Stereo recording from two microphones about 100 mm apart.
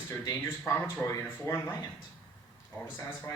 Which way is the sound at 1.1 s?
30° left (ahead or behind).